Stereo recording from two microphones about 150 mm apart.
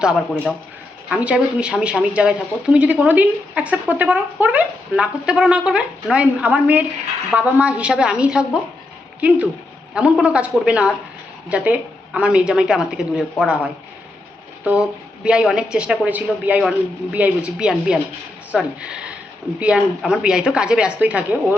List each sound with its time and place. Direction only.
0.0 s a woman's voice: 5° right (ahead or behind)